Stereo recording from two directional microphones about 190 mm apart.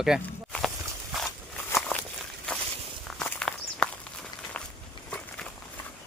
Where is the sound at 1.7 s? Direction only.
10° left (ahead or behind).